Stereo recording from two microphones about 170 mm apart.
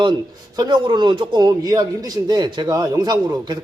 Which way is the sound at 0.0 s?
25° right (ahead or behind).